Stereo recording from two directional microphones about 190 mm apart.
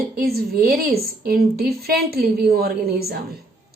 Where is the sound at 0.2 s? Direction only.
55° right (ahead or behind).